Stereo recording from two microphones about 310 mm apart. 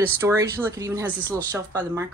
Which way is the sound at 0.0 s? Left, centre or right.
Centre.